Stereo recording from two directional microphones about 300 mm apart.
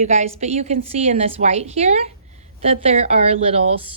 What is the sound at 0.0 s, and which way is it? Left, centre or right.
Speech, right.